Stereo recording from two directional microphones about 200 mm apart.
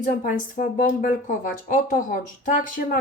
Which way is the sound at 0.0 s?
40° left (ahead or behind).